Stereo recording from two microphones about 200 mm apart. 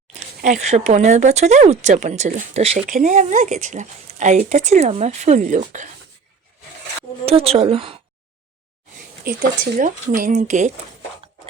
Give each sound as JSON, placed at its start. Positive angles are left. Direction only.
{"t": 0.1, "sound": "speech", "side_deg": -35}
{"t": 7.3, "sound": "speech", "side_deg": -30}
{"t": 9.7, "sound": "speech", "side_deg": -40}